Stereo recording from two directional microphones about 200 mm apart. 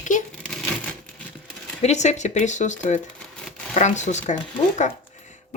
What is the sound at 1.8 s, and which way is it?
Speech, 35° left (ahead or behind).